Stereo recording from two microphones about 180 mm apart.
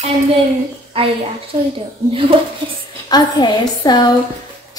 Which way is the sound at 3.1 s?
25° left (ahead or behind).